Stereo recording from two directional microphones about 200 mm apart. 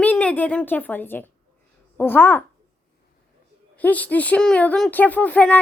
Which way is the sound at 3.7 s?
10° left (ahead or behind).